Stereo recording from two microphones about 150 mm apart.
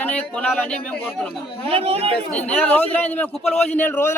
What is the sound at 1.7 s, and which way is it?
Speech, 40° right (ahead or behind).